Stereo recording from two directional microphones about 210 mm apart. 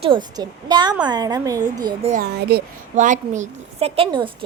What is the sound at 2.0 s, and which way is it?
A woman's voice, 35° right (ahead or behind).